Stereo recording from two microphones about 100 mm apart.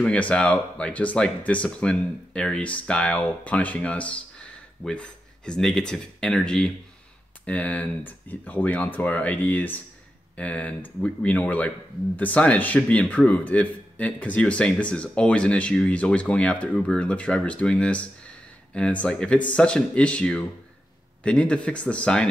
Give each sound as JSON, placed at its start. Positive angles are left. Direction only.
{"t": 0.0, "sound": "speech", "side_deg": 10}